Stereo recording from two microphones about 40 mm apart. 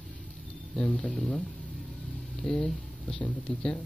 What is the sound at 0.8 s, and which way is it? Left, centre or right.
Speech, left.